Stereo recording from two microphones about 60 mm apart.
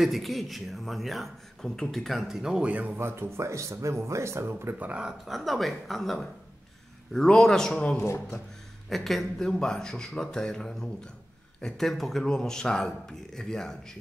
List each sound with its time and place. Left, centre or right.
0.0 s speech: centre
2.6 s speech: right
3.0 s speech: right
4.7 s speech: right
5.0 s speech: centre
8.8 s speech: centre